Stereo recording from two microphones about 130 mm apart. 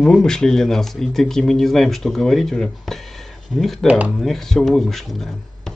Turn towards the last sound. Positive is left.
turn(degrees=0)  # may be behind; listen again after turning